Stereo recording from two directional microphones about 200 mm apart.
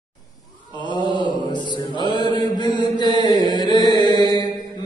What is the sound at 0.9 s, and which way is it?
Mantra, 20° left (ahead or behind).